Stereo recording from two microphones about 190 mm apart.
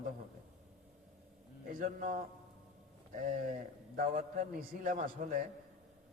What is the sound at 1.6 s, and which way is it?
A man's voice, 45° right (ahead or behind).